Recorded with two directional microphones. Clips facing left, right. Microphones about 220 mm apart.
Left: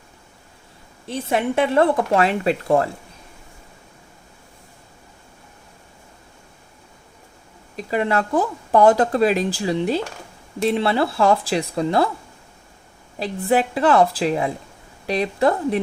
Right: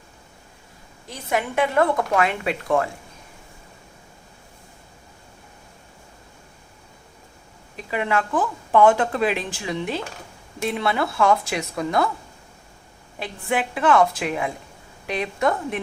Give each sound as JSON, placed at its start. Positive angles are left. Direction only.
{"t": 1.0, "sound": "speech", "side_deg": 25}
{"t": 7.9, "sound": "speech", "side_deg": 40}
{"t": 13.1, "sound": "speech", "side_deg": 35}